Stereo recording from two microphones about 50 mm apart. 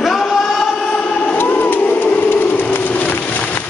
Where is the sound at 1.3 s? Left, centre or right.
Left.